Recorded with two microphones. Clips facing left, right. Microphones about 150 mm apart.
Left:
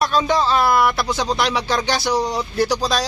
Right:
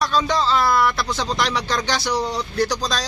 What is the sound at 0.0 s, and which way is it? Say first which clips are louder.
Speech: left 2 dB; 15° left (ahead or behind).